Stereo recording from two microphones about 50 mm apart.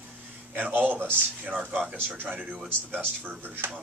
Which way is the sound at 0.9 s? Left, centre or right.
Right.